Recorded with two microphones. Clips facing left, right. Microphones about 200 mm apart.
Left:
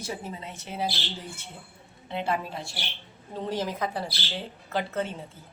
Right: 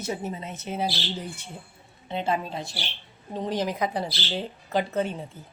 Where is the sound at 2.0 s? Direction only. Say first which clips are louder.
Right 2 dB; 20° right (ahead or behind).